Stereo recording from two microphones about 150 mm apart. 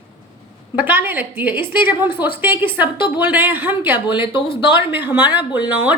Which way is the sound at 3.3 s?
10° right (ahead or behind).